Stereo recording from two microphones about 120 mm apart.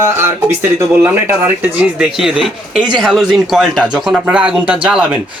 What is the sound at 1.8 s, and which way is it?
Speech, 5° right (ahead or behind).